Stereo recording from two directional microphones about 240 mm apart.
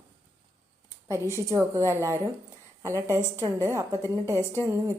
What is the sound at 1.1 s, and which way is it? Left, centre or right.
A woman's voice, centre.